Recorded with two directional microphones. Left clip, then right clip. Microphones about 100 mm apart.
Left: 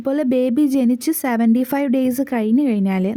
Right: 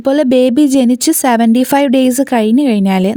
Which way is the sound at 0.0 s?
50° right (ahead or behind).